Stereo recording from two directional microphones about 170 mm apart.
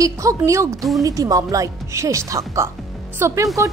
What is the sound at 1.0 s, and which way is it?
A woman's voice, 20° right (ahead or behind).